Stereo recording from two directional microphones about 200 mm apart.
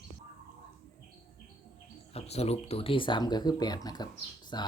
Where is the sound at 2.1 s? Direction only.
30° left (ahead or behind).